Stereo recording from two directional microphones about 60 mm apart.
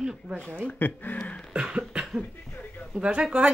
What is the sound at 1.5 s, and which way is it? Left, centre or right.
Cough, centre.